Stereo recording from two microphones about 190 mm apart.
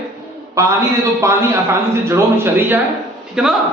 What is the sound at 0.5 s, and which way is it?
A man's voice, 15° right (ahead or behind).